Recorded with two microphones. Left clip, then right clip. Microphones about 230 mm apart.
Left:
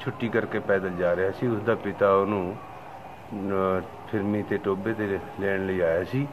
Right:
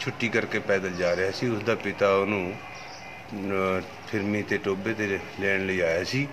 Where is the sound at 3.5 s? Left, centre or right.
Centre.